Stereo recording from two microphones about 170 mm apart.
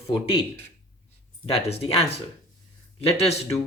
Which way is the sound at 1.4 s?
35° left (ahead or behind).